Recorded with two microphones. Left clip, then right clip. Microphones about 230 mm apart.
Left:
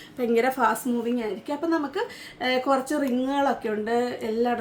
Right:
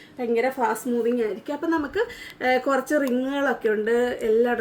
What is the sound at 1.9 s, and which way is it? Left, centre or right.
Speech, centre.